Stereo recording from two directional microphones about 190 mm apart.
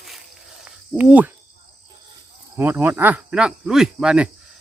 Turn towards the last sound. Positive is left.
turn(degrees=-5)  # may be behind; listen again after turning